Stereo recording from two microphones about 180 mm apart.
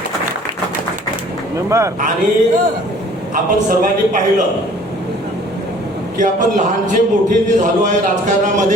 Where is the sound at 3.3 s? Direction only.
50° right (ahead or behind).